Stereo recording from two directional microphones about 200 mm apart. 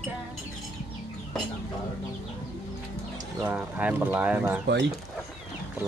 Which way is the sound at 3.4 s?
5° right (ahead or behind).